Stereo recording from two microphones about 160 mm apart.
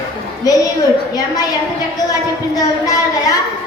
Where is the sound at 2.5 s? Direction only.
20° left (ahead or behind).